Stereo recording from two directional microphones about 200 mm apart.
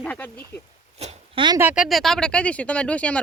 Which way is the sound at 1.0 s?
35° right (ahead or behind).